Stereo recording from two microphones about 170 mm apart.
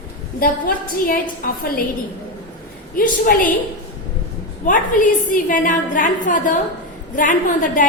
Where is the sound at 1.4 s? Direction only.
55° left (ahead or behind).